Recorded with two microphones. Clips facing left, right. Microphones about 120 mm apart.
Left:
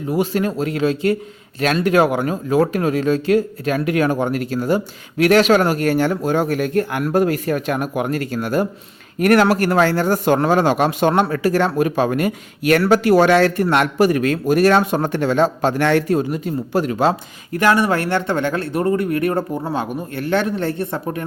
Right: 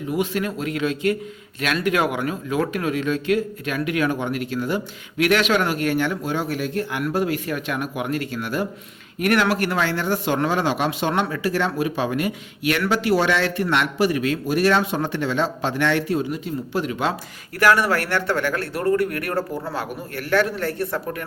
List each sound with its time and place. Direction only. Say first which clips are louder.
0.1 s speech: left 5 dB; 35° left (ahead or behind)
17.5 s speech: left 2 dB; 20° left (ahead or behind)